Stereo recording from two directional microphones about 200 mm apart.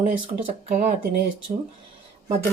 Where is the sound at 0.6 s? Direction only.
35° right (ahead or behind).